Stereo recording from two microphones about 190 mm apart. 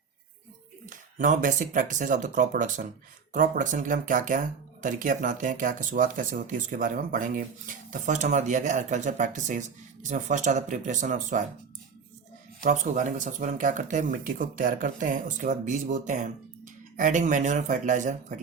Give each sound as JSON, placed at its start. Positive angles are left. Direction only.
{"t": 0.9, "sound": "speech", "side_deg": -40}
{"t": 12.6, "sound": "speech", "side_deg": -40}